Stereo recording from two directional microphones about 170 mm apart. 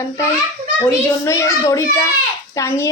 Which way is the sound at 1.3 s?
15° left (ahead or behind).